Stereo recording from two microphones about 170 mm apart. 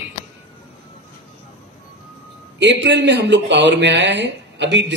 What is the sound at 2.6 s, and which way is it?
A man's voice, 90° right.